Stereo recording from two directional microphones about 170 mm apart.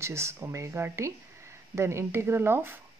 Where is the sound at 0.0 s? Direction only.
15° right (ahead or behind).